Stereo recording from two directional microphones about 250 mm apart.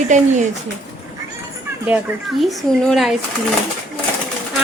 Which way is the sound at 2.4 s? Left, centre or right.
Centre.